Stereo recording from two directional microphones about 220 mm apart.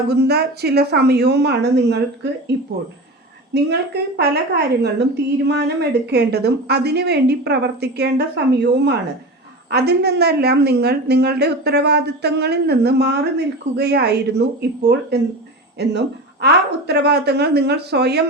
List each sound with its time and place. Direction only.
0.1 s a woman's voice: 50° right (ahead or behind)
3.5 s a woman's voice: 50° right (ahead or behind)